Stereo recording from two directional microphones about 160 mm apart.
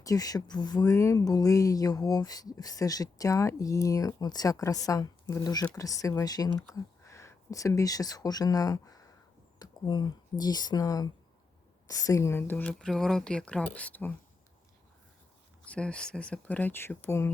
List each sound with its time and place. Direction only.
0.0 s speech: 20° left (ahead or behind)
15.6 s speech: 5° left (ahead or behind)